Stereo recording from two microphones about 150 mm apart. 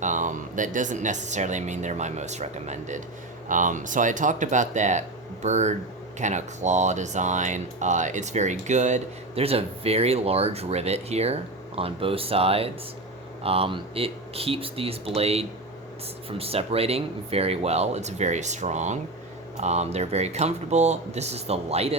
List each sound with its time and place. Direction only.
0.0 s speech: 55° right (ahead or behind)